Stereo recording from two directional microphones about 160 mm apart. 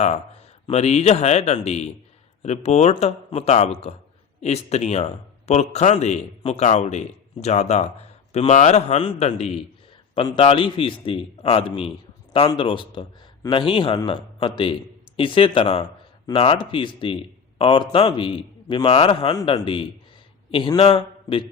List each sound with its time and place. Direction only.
0.7 s a man's voice: 45° left (ahead or behind)
19.3 s a man's voice: 25° left (ahead or behind)